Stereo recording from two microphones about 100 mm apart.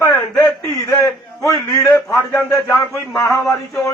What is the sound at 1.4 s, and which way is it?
Speech, 35° left (ahead or behind).